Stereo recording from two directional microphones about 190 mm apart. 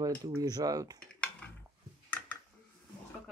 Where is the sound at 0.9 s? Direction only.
5° left (ahead or behind).